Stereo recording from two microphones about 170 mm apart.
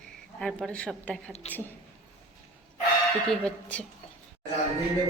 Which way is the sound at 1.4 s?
40° left (ahead or behind).